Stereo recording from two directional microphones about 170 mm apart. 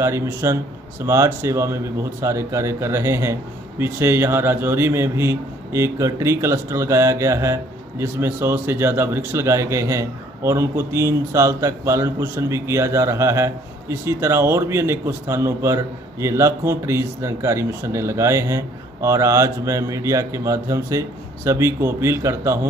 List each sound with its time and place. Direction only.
0.0 s a man's voice: 15° right (ahead or behind)